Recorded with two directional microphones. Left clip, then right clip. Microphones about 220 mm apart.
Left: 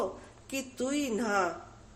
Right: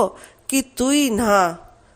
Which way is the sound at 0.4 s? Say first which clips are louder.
Right 13 dB; 45° right (ahead or behind).